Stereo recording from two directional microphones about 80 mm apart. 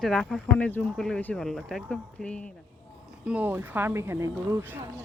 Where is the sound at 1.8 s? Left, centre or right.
Centre.